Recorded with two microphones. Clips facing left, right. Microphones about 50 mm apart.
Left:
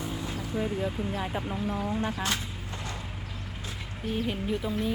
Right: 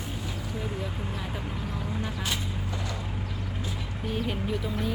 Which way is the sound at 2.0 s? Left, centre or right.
Left.